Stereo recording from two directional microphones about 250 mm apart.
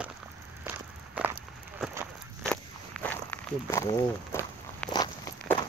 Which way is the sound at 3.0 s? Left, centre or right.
Centre.